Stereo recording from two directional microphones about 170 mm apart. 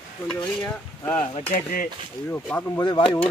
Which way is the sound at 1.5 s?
55° left (ahead or behind).